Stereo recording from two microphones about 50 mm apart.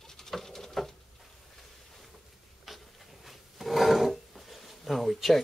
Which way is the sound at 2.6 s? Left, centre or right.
Centre.